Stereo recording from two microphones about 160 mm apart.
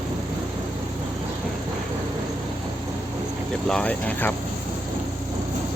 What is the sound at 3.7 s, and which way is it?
Speech, 5° left (ahead or behind).